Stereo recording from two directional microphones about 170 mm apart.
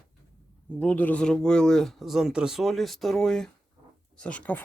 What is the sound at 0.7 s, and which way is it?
Speech, 10° left (ahead or behind).